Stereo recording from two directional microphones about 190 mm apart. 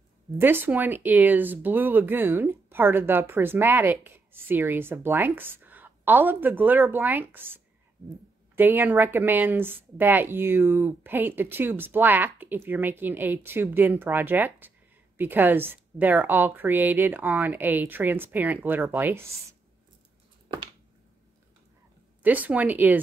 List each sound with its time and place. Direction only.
0.4 s speech: 10° right (ahead or behind)
20.4 s a sound: 25° right (ahead or behind)
22.2 s speech: 10° right (ahead or behind)